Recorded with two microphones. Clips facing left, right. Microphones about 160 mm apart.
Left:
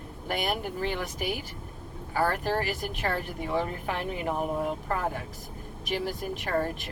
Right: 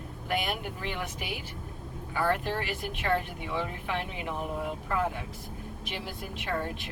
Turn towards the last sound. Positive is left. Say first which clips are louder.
# left 4 dB
turn(degrees=40)  # may be behind; listen again after turning